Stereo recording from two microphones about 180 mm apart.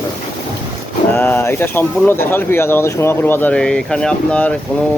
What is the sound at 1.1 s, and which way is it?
Speech, 10° left (ahead or behind).